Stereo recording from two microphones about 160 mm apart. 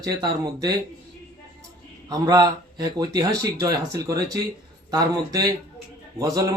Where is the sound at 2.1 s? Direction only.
20° right (ahead or behind).